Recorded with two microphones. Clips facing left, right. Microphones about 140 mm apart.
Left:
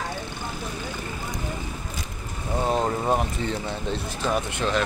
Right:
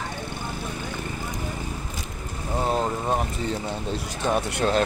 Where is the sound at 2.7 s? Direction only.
5° left (ahead or behind).